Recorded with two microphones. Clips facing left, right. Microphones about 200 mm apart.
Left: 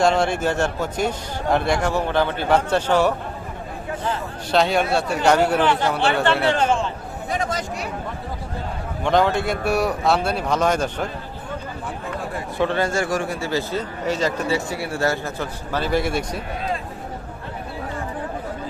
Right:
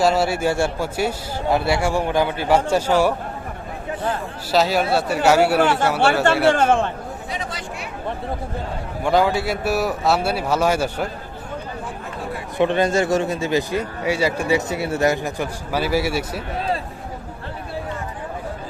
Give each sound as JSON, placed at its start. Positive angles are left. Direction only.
{"t": 0.0, "sound": "a man's voice", "side_deg": -5}
{"t": 4.5, "sound": "a man's voice", "side_deg": -5}
{"t": 6.5, "sound": "a man's voice", "side_deg": -50}
{"t": 7.3, "sound": "speech", "side_deg": 45}
{"t": 9.0, "sound": "a man's voice", "side_deg": -5}
{"t": 12.5, "sound": "a man's voice", "side_deg": -20}